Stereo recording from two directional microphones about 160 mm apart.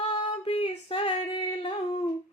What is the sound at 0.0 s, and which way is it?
Female singing, 40° left (ahead or behind).